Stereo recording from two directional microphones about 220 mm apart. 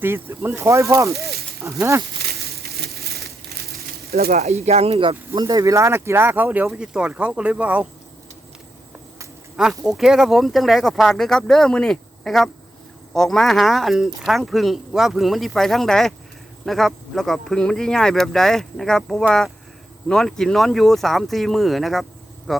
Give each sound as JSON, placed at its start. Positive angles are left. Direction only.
{"t": 0.0, "sound": "speech", "side_deg": -10}
{"t": 1.2, "sound": "a sound", "side_deg": -45}
{"t": 1.6, "sound": "speech", "side_deg": -15}
{"t": 2.4, "sound": "crushing", "side_deg": -45}
{"t": 4.2, "sound": "speech", "side_deg": -30}
{"t": 9.6, "sound": "a man's voice", "side_deg": -5}